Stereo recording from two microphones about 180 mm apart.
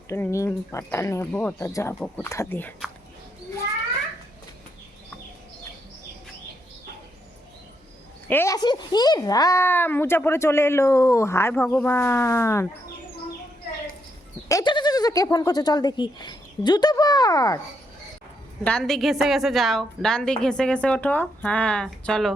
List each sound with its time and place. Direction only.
0.1 s speech: 15° left (ahead or behind)
8.3 s speech: 15° left (ahead or behind)
14.4 s speech: 20° left (ahead or behind)
18.6 s a woman's voice: 5° left (ahead or behind)